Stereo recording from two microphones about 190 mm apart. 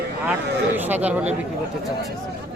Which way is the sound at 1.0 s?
10° right (ahead or behind).